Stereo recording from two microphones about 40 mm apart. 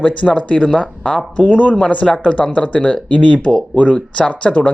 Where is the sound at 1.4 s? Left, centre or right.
Left.